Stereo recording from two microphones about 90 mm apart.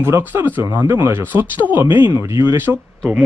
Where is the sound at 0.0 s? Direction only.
25° right (ahead or behind).